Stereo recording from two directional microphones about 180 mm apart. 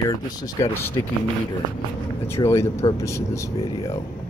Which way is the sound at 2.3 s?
15° left (ahead or behind).